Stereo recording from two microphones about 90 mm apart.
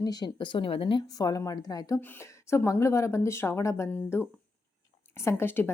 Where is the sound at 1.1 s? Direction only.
45° left (ahead or behind).